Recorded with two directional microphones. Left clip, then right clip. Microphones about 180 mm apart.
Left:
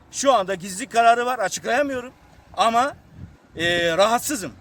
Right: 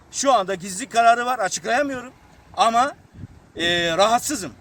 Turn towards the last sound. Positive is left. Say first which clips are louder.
# right 1 dB
turn(degrees=20)  # may be behind; listen again after turning